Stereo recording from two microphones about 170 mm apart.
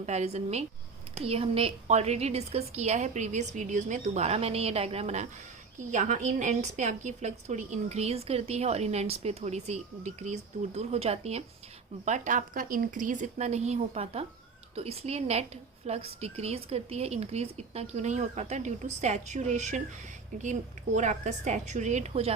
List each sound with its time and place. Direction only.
0.0 s a woman's voice: 40° right (ahead or behind)